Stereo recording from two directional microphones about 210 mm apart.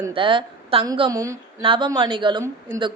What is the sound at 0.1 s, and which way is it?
A woman's voice, 25° right (ahead or behind).